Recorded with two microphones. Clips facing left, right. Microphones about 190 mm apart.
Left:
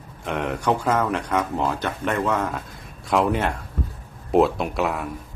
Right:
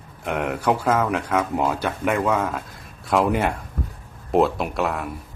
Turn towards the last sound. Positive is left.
turn(degrees=0)  # may be behind; listen again after turning